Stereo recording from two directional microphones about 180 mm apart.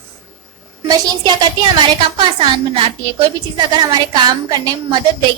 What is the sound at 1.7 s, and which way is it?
A woman's voice, 25° right (ahead or behind).